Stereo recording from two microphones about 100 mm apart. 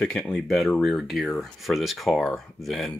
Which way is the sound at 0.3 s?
5° left (ahead or behind).